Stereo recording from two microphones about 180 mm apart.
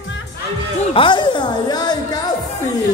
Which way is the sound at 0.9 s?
25° left (ahead or behind).